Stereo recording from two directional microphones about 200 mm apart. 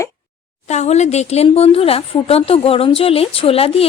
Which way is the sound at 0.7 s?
35° left (ahead or behind).